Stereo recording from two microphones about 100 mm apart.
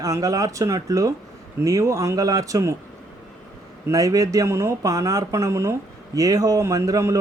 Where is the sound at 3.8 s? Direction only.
35° right (ahead or behind).